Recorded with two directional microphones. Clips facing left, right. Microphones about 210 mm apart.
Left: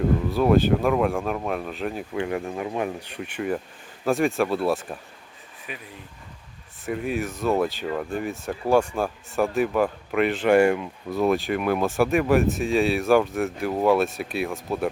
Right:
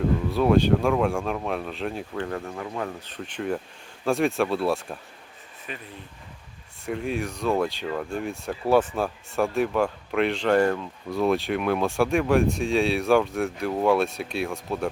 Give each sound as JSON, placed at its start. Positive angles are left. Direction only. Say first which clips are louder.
{"t": 0.3, "sound": "speech", "louder": "even", "side_deg": 0}
{"t": 2.2, "sound": "speech", "louder": "left 4 dB", "side_deg": 15}
{"t": 6.8, "sound": "speech", "louder": "left 1 dB", "side_deg": 5}